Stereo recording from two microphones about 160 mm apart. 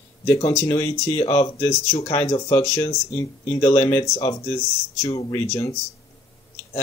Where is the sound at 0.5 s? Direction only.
25° left (ahead or behind).